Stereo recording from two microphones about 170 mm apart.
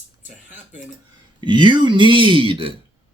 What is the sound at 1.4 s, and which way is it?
Speech, 30° right (ahead or behind).